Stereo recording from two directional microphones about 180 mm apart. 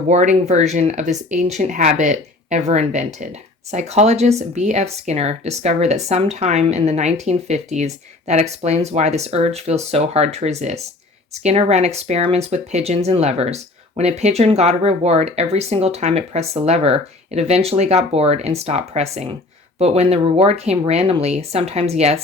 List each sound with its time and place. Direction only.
0.1 s speech: 40° right (ahead or behind)